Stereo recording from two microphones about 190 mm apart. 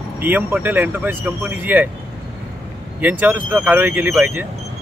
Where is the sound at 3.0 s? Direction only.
10° right (ahead or behind).